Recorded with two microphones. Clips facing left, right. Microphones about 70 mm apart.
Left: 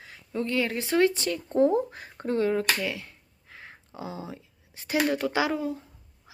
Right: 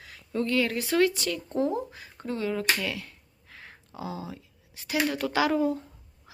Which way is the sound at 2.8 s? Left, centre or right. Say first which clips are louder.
Left 1 dB; left.